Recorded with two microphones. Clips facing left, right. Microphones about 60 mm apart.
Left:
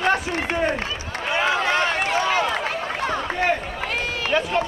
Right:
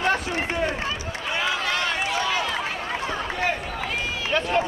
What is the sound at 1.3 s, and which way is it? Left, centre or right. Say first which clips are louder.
Run: left 5 dB; left.